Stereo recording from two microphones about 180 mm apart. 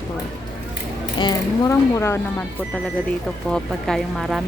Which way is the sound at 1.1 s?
20° left (ahead or behind).